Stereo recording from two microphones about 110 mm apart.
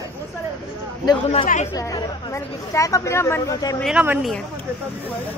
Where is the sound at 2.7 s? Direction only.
30° left (ahead or behind).